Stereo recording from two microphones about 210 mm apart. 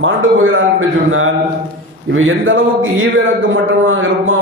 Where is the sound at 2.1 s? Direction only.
70° right (ahead or behind).